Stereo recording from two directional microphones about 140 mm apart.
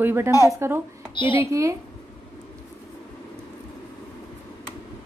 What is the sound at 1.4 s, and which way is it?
Speech, 20° right (ahead or behind).